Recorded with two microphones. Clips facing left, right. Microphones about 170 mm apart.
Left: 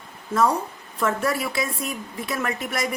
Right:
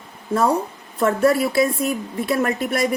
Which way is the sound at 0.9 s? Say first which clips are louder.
Right 7 dB; 35° right (ahead or behind).